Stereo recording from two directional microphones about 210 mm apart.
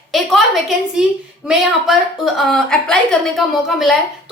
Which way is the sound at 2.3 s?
Centre (ahead or behind).